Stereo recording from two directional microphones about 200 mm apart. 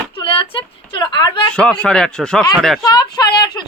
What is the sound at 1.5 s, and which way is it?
Speech, 5° left (ahead or behind).